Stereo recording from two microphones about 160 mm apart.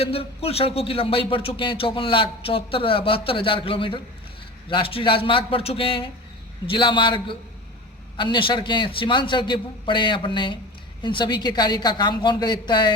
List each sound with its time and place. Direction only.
0.0 s a man's voice: 35° left (ahead or behind)